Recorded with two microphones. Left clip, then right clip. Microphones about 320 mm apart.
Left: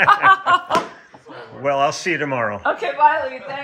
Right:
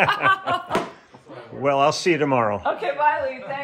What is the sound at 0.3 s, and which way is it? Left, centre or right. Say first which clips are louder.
Snicker: left 7 dB; centre.